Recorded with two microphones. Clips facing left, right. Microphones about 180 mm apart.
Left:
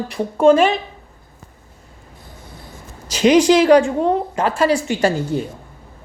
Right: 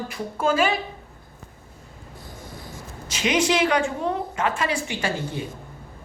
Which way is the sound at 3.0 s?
35° left (ahead or behind).